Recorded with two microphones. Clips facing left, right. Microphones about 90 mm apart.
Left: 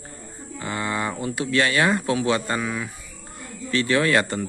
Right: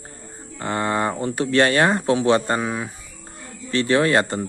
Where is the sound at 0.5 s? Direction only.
45° right (ahead or behind).